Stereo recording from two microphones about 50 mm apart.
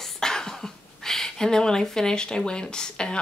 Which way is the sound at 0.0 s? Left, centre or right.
Centre.